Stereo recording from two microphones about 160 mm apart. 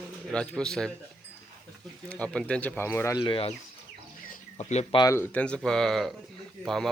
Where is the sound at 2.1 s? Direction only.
5° left (ahead or behind).